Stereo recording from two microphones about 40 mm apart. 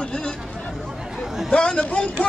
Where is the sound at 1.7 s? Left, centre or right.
Left.